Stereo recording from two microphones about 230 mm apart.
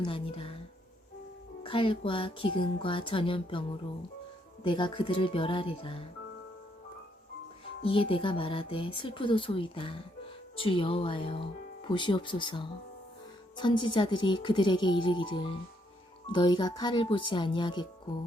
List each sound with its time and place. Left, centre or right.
0.0 s speech: left
1.6 s speech: left
7.8 s speech: left